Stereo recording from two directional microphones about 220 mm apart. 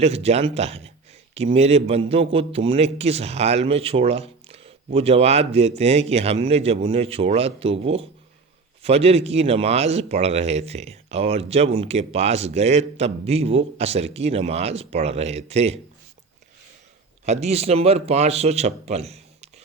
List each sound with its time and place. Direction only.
0.0 s speech: 30° right (ahead or behind)
17.2 s speech: 30° right (ahead or behind)